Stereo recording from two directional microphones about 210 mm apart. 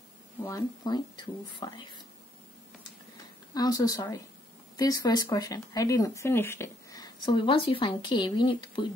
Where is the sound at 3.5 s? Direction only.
20° left (ahead or behind).